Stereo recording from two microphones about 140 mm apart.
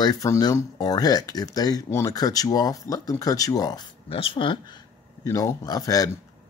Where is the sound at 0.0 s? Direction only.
25° left (ahead or behind).